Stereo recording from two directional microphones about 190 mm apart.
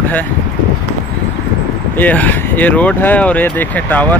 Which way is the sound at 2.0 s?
10° left (ahead or behind).